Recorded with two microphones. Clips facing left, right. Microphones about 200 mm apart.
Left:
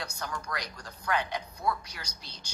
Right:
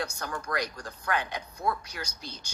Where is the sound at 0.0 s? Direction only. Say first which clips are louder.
Right 3 dB; 50° right (ahead or behind).